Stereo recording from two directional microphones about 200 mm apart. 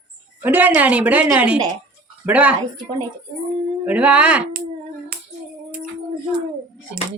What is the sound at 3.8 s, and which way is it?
Speech, 5° right (ahead or behind).